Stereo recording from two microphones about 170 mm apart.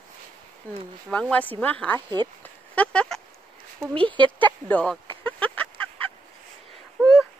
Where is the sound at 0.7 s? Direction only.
10° left (ahead or behind).